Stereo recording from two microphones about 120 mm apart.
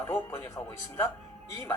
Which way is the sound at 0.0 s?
20° left (ahead or behind).